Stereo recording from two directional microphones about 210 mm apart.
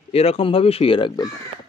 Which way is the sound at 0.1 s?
30° left (ahead or behind).